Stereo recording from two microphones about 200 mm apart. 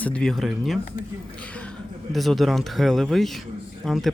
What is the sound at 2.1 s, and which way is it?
Speech, centre (ahead or behind).